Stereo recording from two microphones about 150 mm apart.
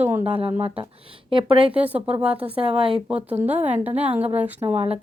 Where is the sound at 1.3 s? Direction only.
35° right (ahead or behind).